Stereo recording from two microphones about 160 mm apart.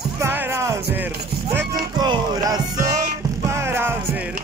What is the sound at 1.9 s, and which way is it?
Music, 25° right (ahead or behind).